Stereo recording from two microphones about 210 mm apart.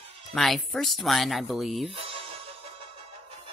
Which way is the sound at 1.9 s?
25° right (ahead or behind).